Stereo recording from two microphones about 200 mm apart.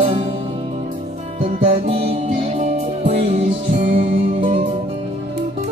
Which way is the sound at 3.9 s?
35° right (ahead or behind).